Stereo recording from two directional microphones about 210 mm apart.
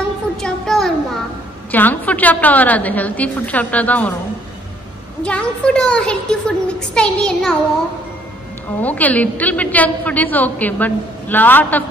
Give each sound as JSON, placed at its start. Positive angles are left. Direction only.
{"t": 0.4, "sound": "a sound", "side_deg": 0}
{"t": 1.7, "sound": "a woman's voice", "side_deg": 10}
{"t": 5.2, "sound": "a woman's voice", "side_deg": 5}
{"t": 8.8, "sound": "a woman's voice", "side_deg": 5}